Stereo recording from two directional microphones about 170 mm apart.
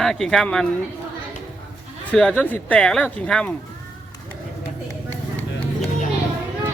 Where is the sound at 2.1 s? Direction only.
5° left (ahead or behind).